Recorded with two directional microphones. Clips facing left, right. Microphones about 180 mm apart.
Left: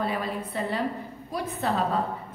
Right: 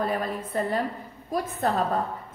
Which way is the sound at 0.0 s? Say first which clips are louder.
Right 1 dB; 45° right (ahead or behind).